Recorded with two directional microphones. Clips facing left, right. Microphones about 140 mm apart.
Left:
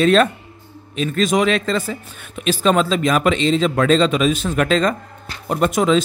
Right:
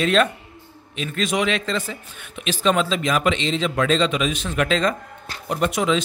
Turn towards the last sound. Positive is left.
turn(degrees=40)  # may be behind; listen again after turning